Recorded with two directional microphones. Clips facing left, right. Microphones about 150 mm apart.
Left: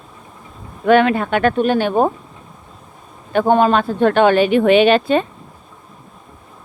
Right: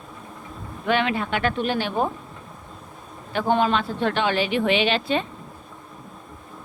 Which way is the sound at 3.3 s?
50° left (ahead or behind).